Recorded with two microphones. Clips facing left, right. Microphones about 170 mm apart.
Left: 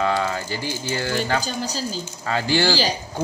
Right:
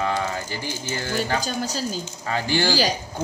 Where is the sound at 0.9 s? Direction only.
20° right (ahead or behind).